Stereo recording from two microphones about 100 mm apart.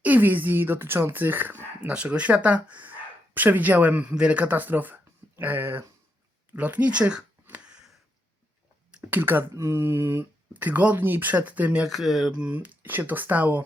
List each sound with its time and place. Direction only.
0.0 s speech: 15° right (ahead or behind)
7.4 s a sound: 10° right (ahead or behind)
8.9 s speech: 15° right (ahead or behind)
10.5 s speech: 15° right (ahead or behind)
12.4 s speech: 15° right (ahead or behind)